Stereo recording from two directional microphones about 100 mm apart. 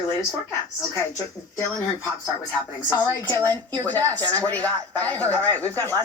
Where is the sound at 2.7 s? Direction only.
35° left (ahead or behind).